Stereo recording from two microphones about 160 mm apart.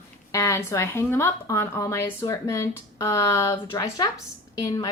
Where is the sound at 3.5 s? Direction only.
25° left (ahead or behind).